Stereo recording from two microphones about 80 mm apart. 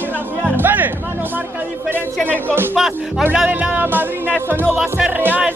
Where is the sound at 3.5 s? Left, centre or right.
Right.